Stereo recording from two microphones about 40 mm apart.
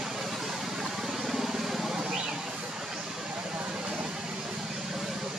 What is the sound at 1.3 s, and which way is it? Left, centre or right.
Vehicle, centre.